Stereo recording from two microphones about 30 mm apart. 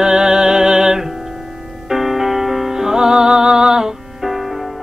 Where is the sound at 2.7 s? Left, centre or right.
Centre.